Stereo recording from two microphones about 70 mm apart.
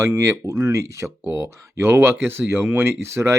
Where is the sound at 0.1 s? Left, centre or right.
Right.